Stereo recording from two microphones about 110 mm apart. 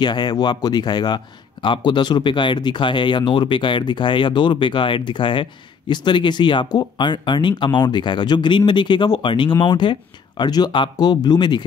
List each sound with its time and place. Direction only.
0.0 s a man's voice: 40° left (ahead or behind)